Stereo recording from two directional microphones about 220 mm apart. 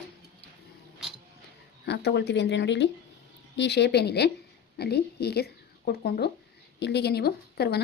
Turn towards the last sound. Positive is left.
turn(degrees=45)  # may be behind; listen again after turning